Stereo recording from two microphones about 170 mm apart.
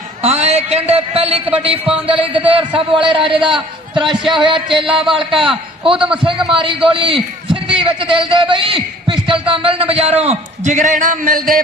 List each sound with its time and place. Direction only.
0.2 s a man's voice: 40° right (ahead or behind)